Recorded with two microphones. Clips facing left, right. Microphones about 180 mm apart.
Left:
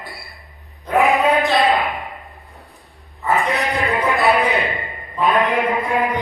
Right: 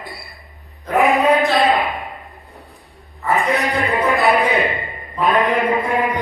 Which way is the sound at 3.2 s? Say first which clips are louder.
Right 1 dB; centre (ahead or behind).